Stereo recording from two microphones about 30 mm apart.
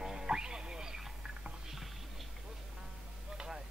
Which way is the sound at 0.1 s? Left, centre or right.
Right.